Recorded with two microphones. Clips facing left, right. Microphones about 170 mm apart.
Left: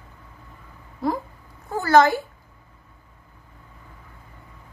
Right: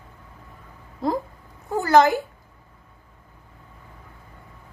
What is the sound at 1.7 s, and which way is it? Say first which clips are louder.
Speech: even; 15° right (ahead or behind).